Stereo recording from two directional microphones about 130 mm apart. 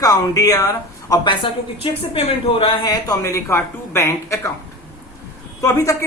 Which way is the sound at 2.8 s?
25° left (ahead or behind).